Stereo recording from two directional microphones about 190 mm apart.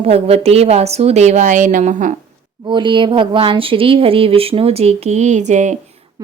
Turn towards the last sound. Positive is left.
turn(degrees=-40)  # may be behind; listen again after turning